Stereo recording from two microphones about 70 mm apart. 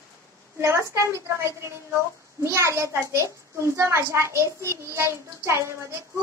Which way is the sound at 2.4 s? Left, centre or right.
Right.